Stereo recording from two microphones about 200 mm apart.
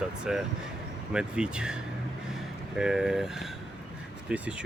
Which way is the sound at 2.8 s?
Centre (ahead or behind).